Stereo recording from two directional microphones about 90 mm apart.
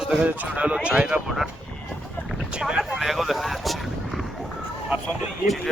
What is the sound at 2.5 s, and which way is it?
Vehicle, 10° right (ahead or behind).